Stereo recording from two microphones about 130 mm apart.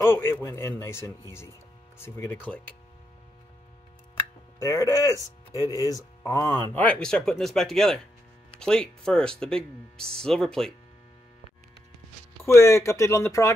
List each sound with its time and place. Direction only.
0.0 s speech: 20° left (ahead or behind)
4.6 s speech: 25° left (ahead or behind); by 10.7 s 5° left (ahead or behind)
12.5 s speech: 20° left (ahead or behind)